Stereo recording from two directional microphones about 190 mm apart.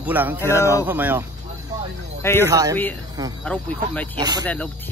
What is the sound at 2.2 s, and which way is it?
Speech, 10° left (ahead or behind).